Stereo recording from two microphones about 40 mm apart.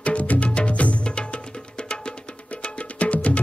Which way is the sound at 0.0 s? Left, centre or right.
Left.